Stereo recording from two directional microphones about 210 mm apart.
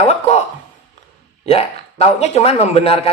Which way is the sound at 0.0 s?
30° left (ahead or behind).